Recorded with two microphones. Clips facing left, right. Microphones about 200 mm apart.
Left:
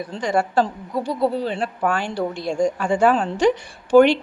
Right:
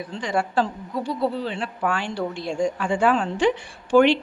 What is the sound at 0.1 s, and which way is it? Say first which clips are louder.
A woman's voice: left 4 dB; 40° left (ahead or behind).